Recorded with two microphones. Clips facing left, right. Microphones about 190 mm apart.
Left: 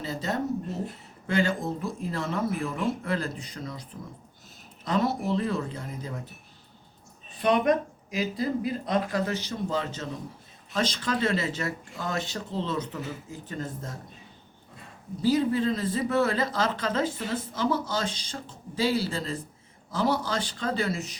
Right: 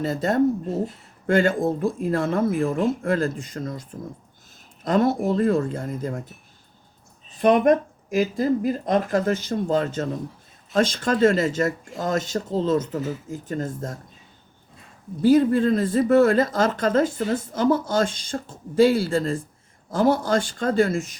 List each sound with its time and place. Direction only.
0.0 s speech: 50° right (ahead or behind)
7.3 s speech: 45° right (ahead or behind)
15.2 s speech: 55° right (ahead or behind)